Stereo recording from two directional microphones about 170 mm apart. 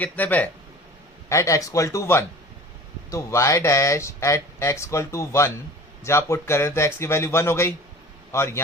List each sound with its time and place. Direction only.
0.0 s speech: 10° left (ahead or behind)